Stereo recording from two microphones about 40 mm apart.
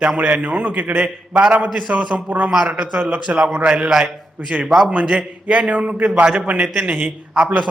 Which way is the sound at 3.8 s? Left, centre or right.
Centre.